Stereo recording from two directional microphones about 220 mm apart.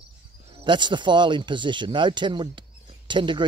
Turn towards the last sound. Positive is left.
turn(degrees=-20)  # may be behind; listen again after turning